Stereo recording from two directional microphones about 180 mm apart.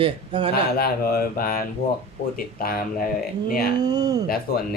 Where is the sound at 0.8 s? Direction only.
55° left (ahead or behind).